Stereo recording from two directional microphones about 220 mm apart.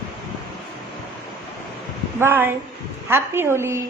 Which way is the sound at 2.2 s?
10° right (ahead or behind).